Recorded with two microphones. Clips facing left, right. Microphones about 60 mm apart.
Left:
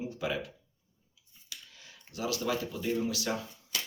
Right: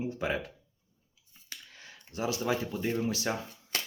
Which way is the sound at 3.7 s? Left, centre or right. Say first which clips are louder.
Right 2 dB; right.